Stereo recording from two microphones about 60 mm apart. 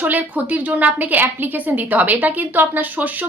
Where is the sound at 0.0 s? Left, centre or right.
Right.